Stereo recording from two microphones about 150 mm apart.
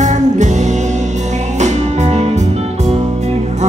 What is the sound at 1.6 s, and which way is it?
Music, 50° right (ahead or behind).